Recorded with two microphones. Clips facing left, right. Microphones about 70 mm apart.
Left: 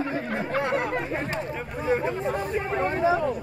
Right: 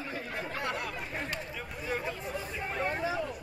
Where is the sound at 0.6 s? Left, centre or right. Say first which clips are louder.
Left 10 dB; left.